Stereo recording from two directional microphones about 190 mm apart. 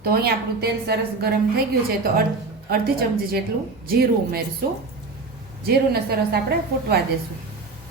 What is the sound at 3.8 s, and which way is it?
Speech, 50° right (ahead or behind).